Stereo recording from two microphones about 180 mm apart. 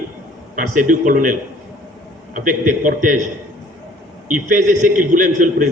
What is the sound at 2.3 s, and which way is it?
Speech, 45° right (ahead or behind).